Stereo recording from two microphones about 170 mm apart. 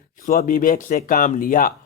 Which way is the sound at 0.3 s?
55° left (ahead or behind).